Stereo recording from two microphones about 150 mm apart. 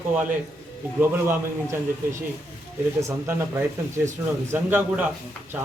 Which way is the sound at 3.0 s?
20° right (ahead or behind).